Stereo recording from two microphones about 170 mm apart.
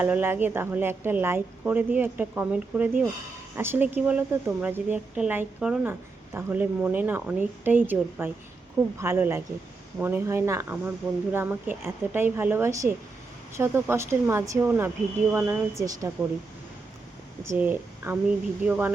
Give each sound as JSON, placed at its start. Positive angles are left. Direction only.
{"t": 0.0, "sound": "speech", "side_deg": -10}
{"t": 17.6, "sound": "speech", "side_deg": -10}